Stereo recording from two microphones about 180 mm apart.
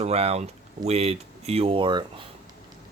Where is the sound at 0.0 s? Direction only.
35° right (ahead or behind).